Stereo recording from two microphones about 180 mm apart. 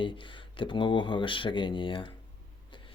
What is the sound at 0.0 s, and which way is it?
Speech, 25° left (ahead or behind).